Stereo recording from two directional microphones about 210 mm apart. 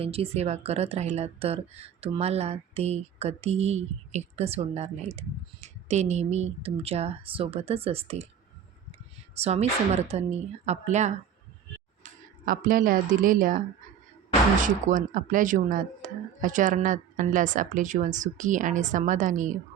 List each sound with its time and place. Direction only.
0.0 s speech: 30° right (ahead or behind)
9.4 s speech: 30° right (ahead or behind)
12.5 s speech: 40° right (ahead or behind)
14.6 s speech: 40° right (ahead or behind)